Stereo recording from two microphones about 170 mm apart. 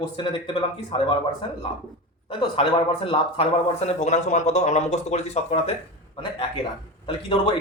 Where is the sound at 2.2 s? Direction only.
30° left (ahead or behind).